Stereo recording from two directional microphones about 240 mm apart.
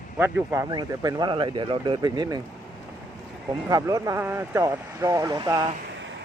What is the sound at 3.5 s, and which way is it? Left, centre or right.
Speech, centre.